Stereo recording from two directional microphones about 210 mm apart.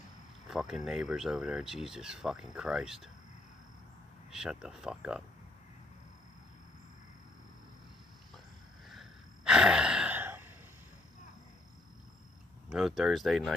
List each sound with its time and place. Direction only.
0.5 s speech: centre (ahead or behind)
4.3 s speech: 5° right (ahead or behind)
8.9 s gasp: 5° right (ahead or behind)
12.6 s speech: centre (ahead or behind)